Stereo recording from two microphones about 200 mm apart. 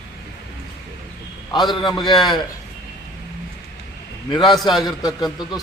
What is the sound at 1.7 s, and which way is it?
Speech, 20° left (ahead or behind).